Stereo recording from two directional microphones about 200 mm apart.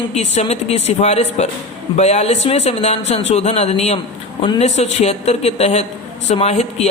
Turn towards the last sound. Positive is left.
turn(degrees=30)  # may be behind; listen again after turning